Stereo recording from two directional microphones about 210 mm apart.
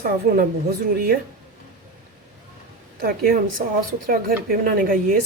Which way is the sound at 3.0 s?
45° right (ahead or behind).